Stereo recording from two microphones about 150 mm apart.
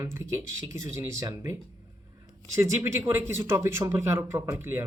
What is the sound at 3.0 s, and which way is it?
Speech, 15° right (ahead or behind).